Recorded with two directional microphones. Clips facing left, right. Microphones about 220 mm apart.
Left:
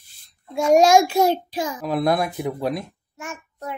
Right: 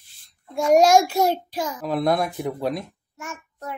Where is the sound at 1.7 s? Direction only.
10° left (ahead or behind).